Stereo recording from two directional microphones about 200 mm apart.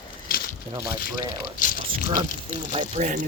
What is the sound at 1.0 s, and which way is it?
Speech, 45° left (ahead or behind).